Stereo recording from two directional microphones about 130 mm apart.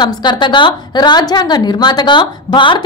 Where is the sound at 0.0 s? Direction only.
35° left (ahead or behind).